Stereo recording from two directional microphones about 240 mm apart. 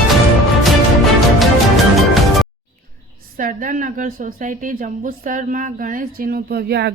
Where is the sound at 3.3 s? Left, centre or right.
Right.